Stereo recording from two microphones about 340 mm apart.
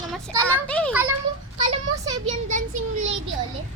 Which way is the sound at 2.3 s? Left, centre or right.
Right.